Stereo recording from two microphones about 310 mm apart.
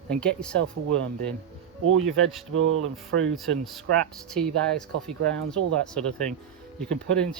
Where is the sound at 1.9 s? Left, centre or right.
Right.